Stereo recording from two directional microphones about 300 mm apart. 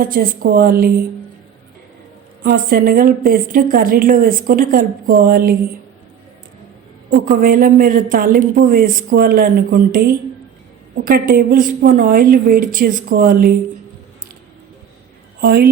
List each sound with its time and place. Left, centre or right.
0.0 s speech: right
2.4 s speech: right
7.1 s speech: right
15.4 s a woman's voice: right